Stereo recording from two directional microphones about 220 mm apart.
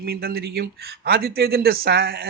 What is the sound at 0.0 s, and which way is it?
Speech, 45° right (ahead or behind).